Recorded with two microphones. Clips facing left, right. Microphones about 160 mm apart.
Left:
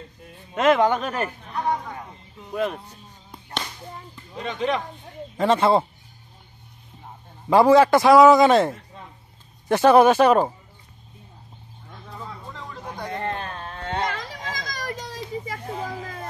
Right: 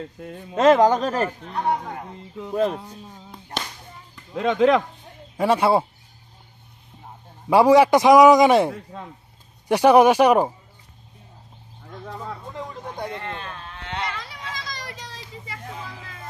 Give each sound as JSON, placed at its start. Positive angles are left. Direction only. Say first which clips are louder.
{"t": 0.2, "sound": "speech", "louder": "right 10 dB", "side_deg": -90}
{"t": 0.6, "sound": "speech", "louder": "right 3 dB", "side_deg": -35}
{"t": 4.4, "sound": "speech", "louder": "right 8 dB", "side_deg": -90}
{"t": 5.4, "sound": "a man's voice", "louder": "even", "side_deg": -10}
{"t": 7.4, "sound": "a man's voice", "louder": "even", "side_deg": -10}
{"t": 12.5, "sound": "a sound", "louder": "right 2 dB", "side_deg": -20}
{"t": 13.1, "sound": "a sound", "louder": "left 4 dB", "side_deg": 40}